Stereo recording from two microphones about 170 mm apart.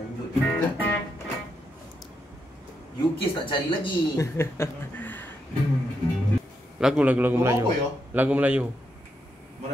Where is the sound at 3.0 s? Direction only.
30° left (ahead or behind).